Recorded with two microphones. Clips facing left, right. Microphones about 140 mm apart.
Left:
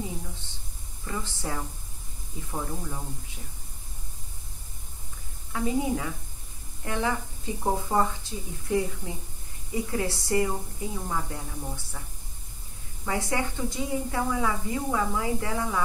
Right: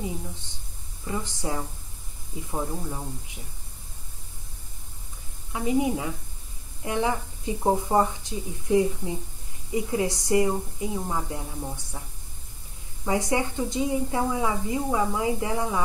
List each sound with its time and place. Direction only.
1.0 s speech: 15° right (ahead or behind)
5.5 s a woman's voice: 20° right (ahead or behind)
13.0 s a woman's voice: 20° right (ahead or behind)